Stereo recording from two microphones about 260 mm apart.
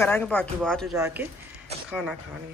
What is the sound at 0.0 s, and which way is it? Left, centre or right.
Speech, centre.